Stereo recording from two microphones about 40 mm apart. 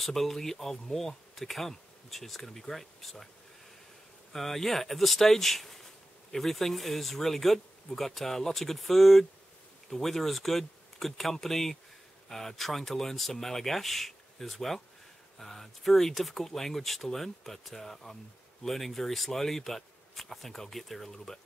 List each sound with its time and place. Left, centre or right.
0.0 s speech: centre
4.3 s speech: centre